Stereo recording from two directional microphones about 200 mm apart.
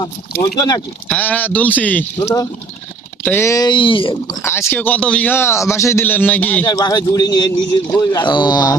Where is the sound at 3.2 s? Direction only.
10° left (ahead or behind).